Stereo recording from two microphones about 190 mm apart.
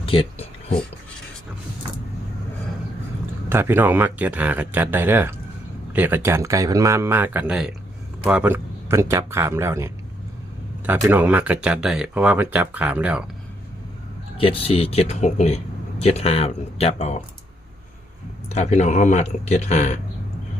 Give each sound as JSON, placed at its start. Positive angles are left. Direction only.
{"t": 0.0, "sound": "speech", "side_deg": 30}
{"t": 3.5, "sound": "speech", "side_deg": -10}
{"t": 14.3, "sound": "speech", "side_deg": 30}
{"t": 18.4, "sound": "speech", "side_deg": 35}